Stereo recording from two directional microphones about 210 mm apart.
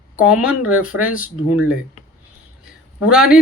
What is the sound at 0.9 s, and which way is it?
Speech, 90° left.